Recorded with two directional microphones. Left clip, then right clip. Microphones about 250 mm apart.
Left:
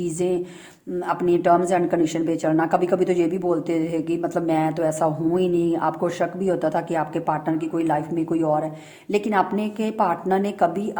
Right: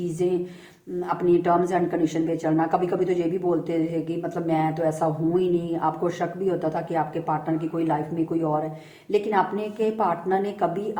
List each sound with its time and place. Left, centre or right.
1.0 s a woman's voice: left
9.1 s a woman's voice: left